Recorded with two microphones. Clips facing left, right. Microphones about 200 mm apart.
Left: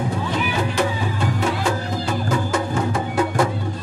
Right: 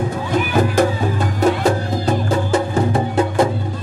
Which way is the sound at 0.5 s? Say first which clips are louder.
Right 8 dB; 45° right (ahead or behind).